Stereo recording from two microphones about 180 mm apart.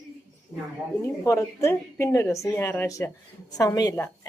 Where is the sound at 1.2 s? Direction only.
15° left (ahead or behind).